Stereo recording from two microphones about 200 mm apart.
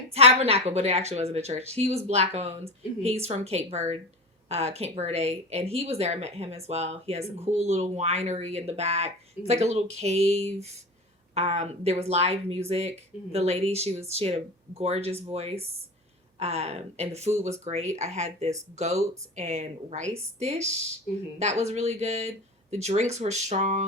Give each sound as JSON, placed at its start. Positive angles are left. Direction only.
{"t": 0.1, "sound": "speech", "side_deg": -30}